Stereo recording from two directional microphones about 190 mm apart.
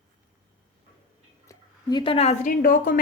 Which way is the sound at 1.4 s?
20° left (ahead or behind).